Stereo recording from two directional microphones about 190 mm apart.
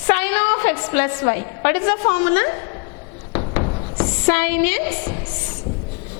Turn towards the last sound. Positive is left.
turn(degrees=15)  # may be behind; listen again after turning